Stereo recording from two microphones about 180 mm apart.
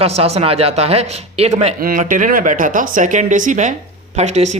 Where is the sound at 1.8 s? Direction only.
50° right (ahead or behind).